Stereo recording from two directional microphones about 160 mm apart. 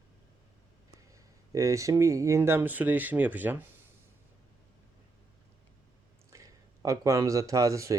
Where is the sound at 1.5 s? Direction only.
20° right (ahead or behind).